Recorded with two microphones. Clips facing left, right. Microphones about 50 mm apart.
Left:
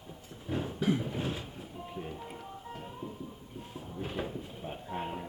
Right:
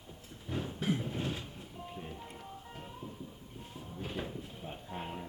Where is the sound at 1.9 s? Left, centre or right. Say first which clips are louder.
Left 5 dB; centre.